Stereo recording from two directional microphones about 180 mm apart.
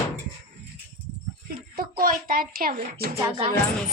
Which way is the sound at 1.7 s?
55° right (ahead or behind).